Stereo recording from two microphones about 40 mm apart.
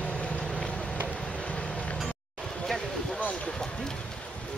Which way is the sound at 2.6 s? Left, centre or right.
Centre.